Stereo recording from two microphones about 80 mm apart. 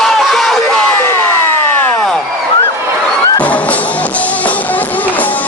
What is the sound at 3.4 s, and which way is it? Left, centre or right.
Music, centre.